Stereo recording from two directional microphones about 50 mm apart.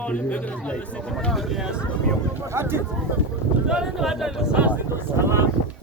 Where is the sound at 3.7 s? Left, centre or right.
Centre.